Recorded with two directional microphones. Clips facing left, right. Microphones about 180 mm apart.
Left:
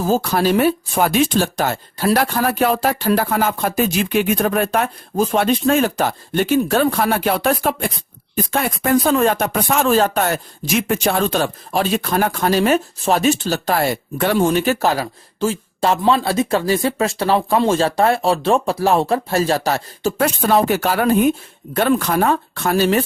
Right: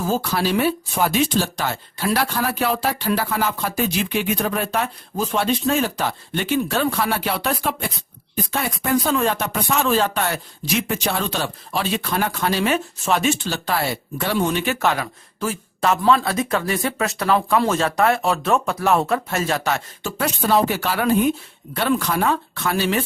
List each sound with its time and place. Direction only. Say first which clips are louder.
0.0 s speech: left 5 dB; 45° left (ahead or behind)